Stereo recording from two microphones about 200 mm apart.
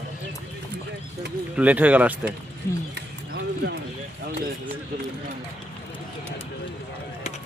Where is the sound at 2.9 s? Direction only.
60° right (ahead or behind).